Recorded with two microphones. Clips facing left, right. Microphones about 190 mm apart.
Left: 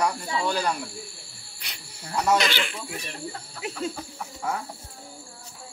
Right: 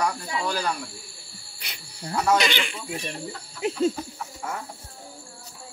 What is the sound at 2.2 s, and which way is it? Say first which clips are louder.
Speech: even; centre (ahead or behind).